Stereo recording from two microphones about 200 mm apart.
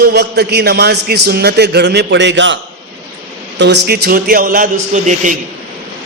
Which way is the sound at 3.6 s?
55° right (ahead or behind).